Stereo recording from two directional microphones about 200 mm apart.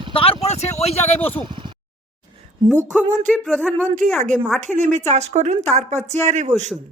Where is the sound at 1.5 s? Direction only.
25° right (ahead or behind).